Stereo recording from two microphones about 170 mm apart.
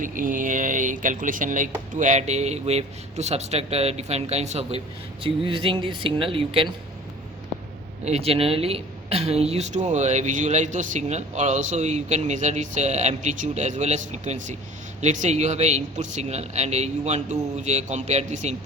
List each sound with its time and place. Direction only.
0.0 s speech: 50° right (ahead or behind); by 6.7 s 30° right (ahead or behind)
8.0 s speech: 40° right (ahead or behind)